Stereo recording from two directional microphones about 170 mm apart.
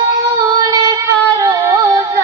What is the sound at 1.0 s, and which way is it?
Music, 15° right (ahead or behind).